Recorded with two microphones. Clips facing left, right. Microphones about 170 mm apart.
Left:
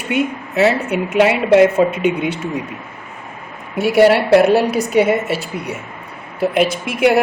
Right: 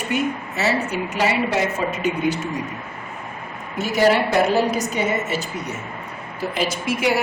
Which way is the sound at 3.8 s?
60° left (ahead or behind).